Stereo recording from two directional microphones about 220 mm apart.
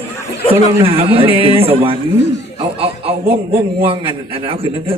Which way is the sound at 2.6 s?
25° right (ahead or behind).